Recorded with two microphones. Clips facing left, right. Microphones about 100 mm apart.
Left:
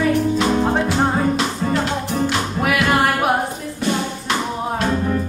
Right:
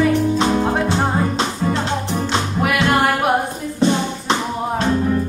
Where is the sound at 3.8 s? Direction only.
25° right (ahead or behind).